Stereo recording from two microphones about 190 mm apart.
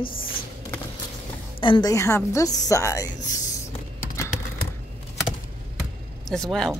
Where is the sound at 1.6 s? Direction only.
25° left (ahead or behind).